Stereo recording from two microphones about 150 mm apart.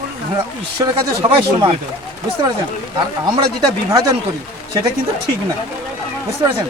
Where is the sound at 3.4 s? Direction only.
25° right (ahead or behind).